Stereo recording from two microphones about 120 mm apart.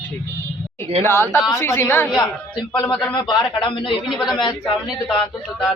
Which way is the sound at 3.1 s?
40° left (ahead or behind).